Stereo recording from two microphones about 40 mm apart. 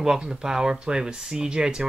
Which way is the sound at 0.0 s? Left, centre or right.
Centre.